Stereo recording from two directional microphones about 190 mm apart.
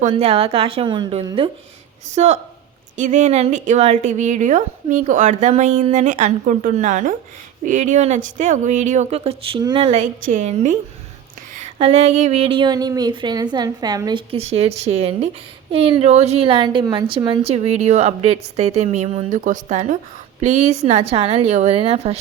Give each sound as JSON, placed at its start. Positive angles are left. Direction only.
{"t": 0.1, "sound": "a woman's voice", "side_deg": -30}
{"t": 2.1, "sound": "speech", "side_deg": -35}